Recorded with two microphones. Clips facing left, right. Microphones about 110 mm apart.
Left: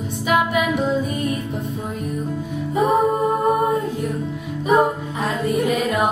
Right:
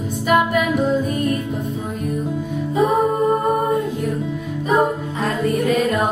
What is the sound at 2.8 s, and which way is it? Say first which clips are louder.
Music: even; centre (ahead or behind).